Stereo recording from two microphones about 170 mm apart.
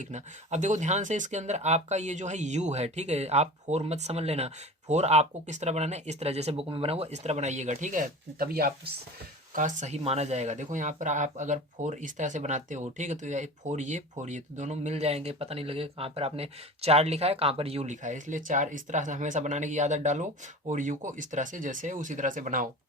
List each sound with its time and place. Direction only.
0.0 s speech: 45° right (ahead or behind); by 8.7 s 60° right (ahead or behind)
9.5 s speech: 50° right (ahead or behind)